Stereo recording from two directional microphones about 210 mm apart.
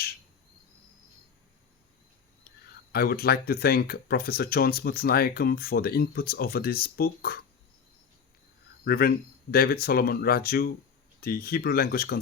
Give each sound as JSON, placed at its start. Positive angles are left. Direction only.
{"t": 2.9, "sound": "speech", "side_deg": 45}
{"t": 8.8, "sound": "speech", "side_deg": 45}